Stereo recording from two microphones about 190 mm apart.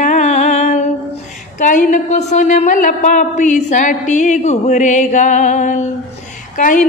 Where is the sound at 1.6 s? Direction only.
40° left (ahead or behind).